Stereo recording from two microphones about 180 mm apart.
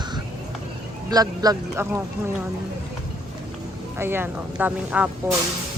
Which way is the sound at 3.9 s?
10° right (ahead or behind).